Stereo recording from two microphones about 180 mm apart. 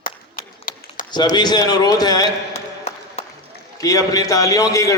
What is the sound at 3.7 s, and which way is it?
A man's voice, 20° left (ahead or behind).